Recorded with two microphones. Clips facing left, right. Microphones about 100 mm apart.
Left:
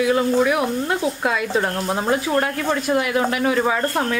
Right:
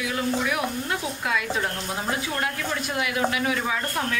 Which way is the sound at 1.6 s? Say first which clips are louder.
Left 7 dB; 45° left (ahead or behind).